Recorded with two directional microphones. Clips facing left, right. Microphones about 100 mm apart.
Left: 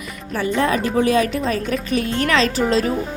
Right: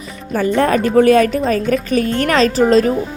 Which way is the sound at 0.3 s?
45° right (ahead or behind).